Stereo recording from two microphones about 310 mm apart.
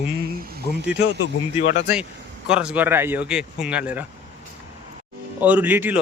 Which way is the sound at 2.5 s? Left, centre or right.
Centre.